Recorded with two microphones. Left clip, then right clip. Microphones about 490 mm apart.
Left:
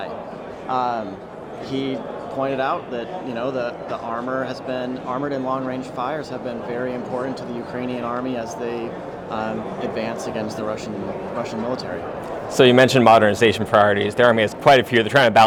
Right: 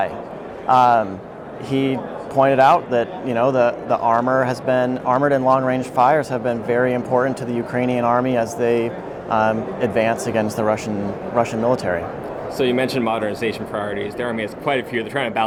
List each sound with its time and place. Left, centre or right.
0.7 s a man's voice: right
12.5 s speech: left